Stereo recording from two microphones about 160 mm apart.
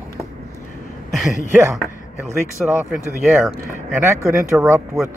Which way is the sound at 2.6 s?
Centre (ahead or behind).